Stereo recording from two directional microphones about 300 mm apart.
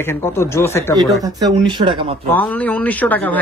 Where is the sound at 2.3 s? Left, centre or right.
Centre.